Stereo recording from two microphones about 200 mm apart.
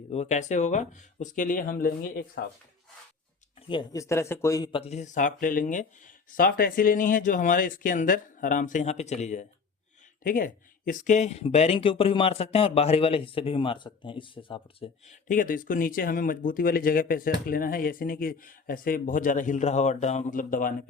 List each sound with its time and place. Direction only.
0.1 s speech: 35° left (ahead or behind)
3.7 s speech: 20° left (ahead or behind)
15.3 s speech: 45° left (ahead or behind)